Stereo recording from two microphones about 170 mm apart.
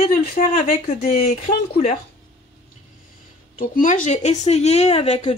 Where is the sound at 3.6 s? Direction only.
50° left (ahead or behind).